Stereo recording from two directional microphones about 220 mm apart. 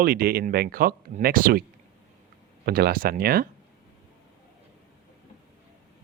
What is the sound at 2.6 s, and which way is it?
Speech, 45° right (ahead or behind).